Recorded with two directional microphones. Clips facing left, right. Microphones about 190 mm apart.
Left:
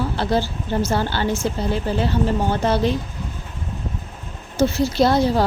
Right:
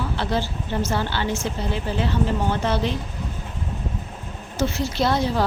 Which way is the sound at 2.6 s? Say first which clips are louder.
Left 6 dB; 40° left (ahead or behind).